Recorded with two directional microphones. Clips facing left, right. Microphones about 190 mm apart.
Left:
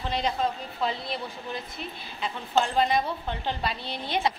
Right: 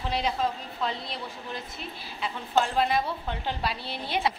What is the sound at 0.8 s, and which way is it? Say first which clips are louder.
A woman's voice: left 3 dB; centre (ahead or behind).